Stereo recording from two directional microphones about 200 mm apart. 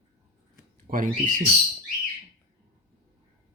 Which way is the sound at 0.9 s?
40° right (ahead or behind).